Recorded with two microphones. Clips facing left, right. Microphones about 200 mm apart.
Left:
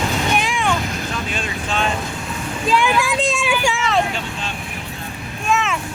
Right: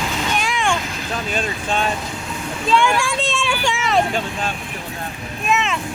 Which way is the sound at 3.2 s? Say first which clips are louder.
Left 2 dB; 15° left (ahead or behind).